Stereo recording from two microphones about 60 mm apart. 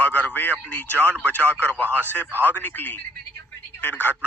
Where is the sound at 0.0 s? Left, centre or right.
Left.